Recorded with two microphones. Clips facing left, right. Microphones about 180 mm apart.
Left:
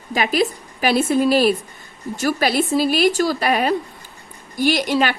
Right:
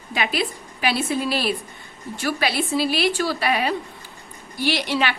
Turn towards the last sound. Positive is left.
turn(degrees=45)  # may be behind; listen again after turning